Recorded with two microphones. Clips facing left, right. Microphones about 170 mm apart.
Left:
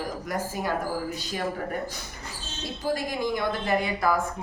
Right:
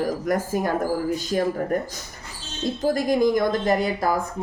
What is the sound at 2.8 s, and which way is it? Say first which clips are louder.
Speech: right 8 dB; 45° right (ahead or behind).